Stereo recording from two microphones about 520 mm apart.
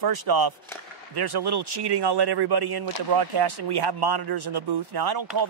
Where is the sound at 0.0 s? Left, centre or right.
Right.